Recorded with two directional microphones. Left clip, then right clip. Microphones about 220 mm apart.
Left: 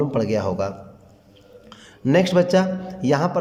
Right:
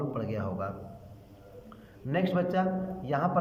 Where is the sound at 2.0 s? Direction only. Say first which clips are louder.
Left 12 dB; 25° left (ahead or behind).